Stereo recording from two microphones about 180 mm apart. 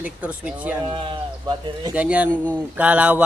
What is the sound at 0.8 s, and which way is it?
Speech, 30° right (ahead or behind).